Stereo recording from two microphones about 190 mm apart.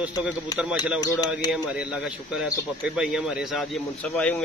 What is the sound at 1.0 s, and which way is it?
Speech, 20° left (ahead or behind).